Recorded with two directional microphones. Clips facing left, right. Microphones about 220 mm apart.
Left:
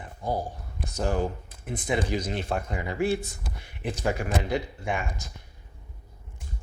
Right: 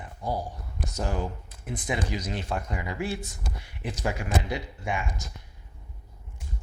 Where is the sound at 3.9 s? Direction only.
55° left (ahead or behind).